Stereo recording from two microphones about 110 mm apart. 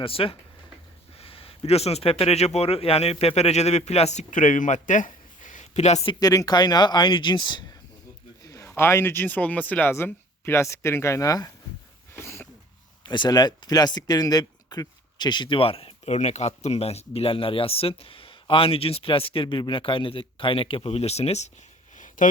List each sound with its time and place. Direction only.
0.0 s speech: 55° left (ahead or behind); by 4.3 s 85° left
5.5 s a sound: 90° left
6.1 s speech: 35° left (ahead or behind)
8.4 s speech: 25° left (ahead or behind)
12.1 s a sound: 25° left (ahead or behind)
13.1 s speech: 40° left (ahead or behind); by 21.5 s 80° left